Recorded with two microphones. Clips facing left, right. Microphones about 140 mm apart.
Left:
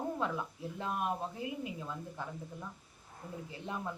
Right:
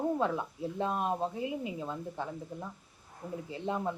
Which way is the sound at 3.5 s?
25° right (ahead or behind).